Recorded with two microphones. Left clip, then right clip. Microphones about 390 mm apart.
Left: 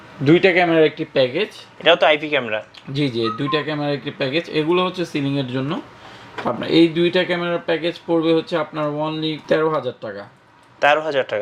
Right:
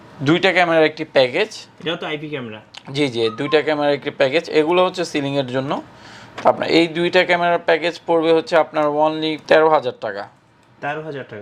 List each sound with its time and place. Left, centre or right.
0.3 s speech: right
1.1 s speech: right
1.8 s speech: left
2.9 s speech: right
6.4 s speech: right
10.8 s a man's voice: left